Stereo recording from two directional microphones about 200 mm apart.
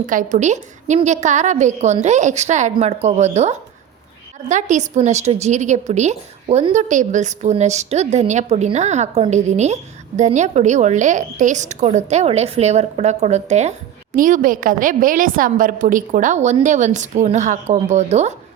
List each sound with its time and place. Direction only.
0.0 s a woman's voice: 40° right (ahead or behind)